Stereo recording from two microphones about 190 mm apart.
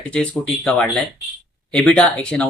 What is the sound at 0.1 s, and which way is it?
Speech, 5° left (ahead or behind).